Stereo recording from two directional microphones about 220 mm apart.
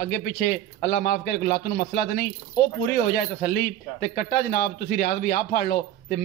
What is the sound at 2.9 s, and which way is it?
Speech, 45° left (ahead or behind).